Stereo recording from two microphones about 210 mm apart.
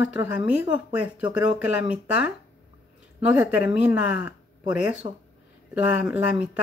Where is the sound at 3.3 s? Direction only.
10° right (ahead or behind).